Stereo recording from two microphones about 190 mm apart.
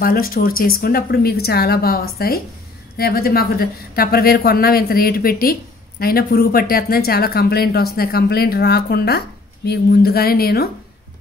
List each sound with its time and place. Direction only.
0.0 s speech: 50° left (ahead or behind)